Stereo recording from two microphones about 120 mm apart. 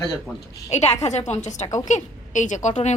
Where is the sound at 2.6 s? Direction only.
75° left (ahead or behind).